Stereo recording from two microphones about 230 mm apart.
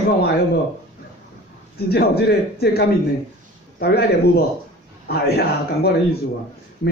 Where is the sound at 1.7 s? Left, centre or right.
Left.